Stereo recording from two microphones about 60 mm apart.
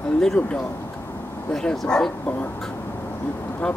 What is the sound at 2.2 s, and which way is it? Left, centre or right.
Speech, left.